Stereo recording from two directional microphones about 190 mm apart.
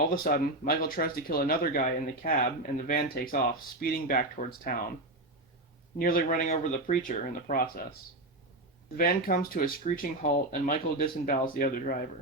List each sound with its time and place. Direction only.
0.1 s speech: 50° left (ahead or behind)
6.0 s speech: 50° left (ahead or behind)
9.0 s speech: 50° left (ahead or behind)